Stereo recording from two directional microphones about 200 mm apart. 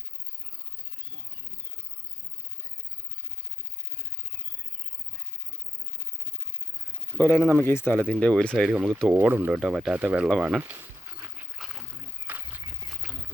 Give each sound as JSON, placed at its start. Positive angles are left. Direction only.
{"t": 7.2, "sound": "speech", "side_deg": 10}
{"t": 9.1, "sound": "speech", "side_deg": -10}
{"t": 10.6, "sound": "a sound", "side_deg": -10}